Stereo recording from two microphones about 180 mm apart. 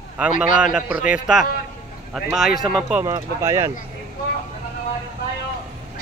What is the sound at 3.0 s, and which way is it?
Speech, 15° right (ahead or behind).